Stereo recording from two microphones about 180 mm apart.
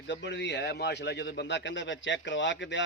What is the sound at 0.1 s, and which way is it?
A man's voice, 80° left.